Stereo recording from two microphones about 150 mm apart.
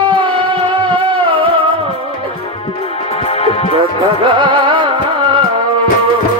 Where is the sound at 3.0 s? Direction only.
40° left (ahead or behind).